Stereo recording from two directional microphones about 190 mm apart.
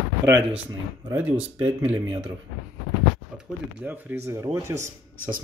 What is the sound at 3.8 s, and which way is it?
Speech, 10° right (ahead or behind).